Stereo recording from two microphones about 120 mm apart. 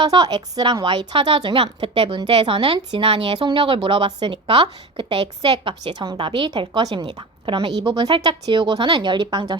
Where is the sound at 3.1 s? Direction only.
50° right (ahead or behind).